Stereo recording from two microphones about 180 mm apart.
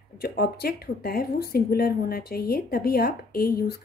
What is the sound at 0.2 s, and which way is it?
Speech, 60° left (ahead or behind).